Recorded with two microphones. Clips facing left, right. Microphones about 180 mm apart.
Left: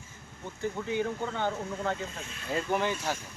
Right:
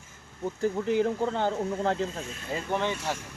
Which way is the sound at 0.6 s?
35° right (ahead or behind).